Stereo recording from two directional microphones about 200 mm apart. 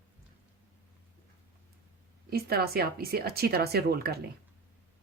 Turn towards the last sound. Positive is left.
turn(degrees=-50)  # may be behind; listen again after turning